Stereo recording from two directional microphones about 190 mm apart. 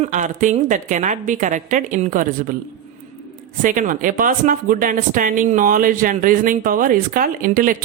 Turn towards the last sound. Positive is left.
turn(degrees=-50)  # may be behind; listen again after turning